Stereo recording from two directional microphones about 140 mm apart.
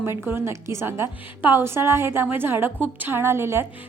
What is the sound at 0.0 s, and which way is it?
A woman's voice, 15° right (ahead or behind).